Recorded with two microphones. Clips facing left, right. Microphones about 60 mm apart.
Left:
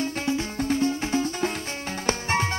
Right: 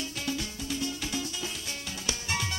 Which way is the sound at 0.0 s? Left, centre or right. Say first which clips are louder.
Left 8 dB; left.